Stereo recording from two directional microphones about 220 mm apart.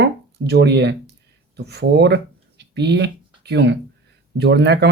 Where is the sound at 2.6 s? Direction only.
50° right (ahead or behind).